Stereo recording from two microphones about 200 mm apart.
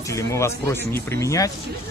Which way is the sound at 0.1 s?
15° left (ahead or behind).